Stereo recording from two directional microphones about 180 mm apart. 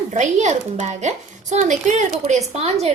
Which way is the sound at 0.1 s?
40° right (ahead or behind).